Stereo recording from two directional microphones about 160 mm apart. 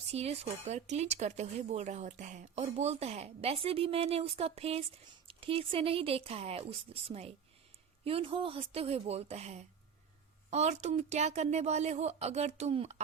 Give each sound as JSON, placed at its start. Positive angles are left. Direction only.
{"t": 0.1, "sound": "a woman's voice", "side_deg": -40}